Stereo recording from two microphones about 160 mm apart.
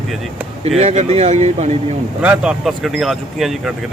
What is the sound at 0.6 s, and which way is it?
Speech, 40° right (ahead or behind).